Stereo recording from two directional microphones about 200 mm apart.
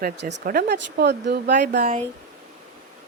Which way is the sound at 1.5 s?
45° right (ahead or behind).